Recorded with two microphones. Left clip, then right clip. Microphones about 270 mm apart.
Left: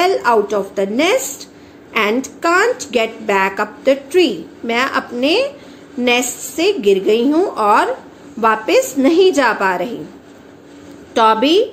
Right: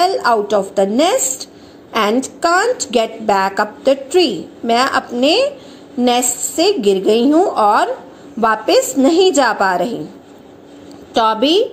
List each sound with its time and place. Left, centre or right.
0.3 s a woman's voice: centre
11.1 s a woman's voice: centre